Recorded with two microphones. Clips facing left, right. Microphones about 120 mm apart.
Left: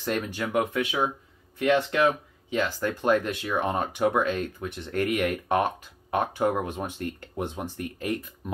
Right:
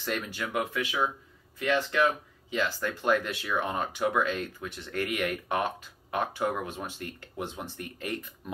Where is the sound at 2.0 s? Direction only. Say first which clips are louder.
Left 3 dB; 50° left (ahead or behind).